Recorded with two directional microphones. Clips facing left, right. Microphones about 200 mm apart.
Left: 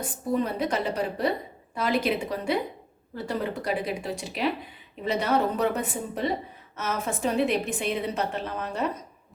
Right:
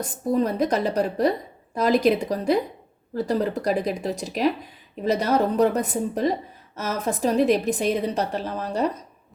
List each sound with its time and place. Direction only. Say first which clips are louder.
0.0 s a woman's voice: right 4 dB; 40° right (ahead or behind)